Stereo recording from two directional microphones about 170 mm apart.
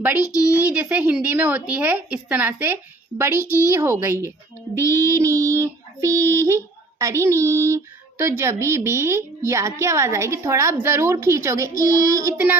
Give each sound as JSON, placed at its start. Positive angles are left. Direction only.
{"t": 0.4, "sound": "a woman's voice", "side_deg": -10}
{"t": 11.8, "sound": "child singing", "side_deg": -20}